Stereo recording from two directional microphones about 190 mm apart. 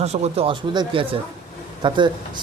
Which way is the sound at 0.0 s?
35° right (ahead or behind).